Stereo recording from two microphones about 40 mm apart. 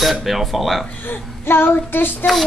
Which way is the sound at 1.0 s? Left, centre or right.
Left.